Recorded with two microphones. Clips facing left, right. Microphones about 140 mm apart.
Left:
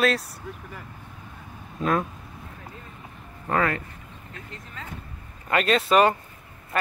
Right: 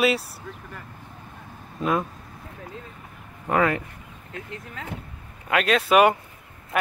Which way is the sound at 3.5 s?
15° right (ahead or behind).